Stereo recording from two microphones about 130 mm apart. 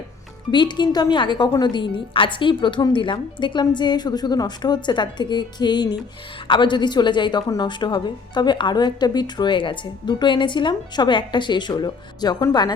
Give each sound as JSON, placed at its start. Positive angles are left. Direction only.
{"t": 0.5, "sound": "a woman's voice", "side_deg": 35}